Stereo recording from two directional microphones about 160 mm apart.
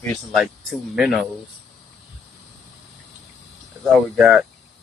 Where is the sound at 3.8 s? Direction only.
5° right (ahead or behind).